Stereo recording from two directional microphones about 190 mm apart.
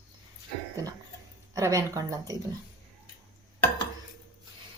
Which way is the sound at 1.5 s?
15° right (ahead or behind).